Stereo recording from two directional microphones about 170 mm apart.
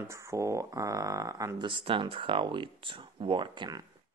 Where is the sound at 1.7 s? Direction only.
30° right (ahead or behind).